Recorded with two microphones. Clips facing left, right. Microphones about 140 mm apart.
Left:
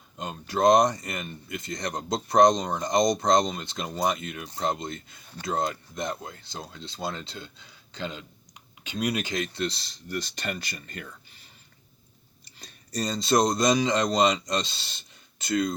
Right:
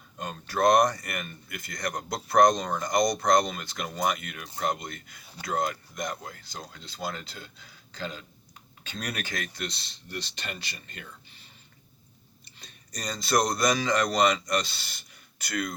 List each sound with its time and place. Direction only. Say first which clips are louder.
0.2 s a man's voice: left 2 dB; 20° left (ahead or behind)
9.6 s speech: left 6 dB; 35° left (ahead or behind)
12.5 s speech: left 6 dB; 35° left (ahead or behind)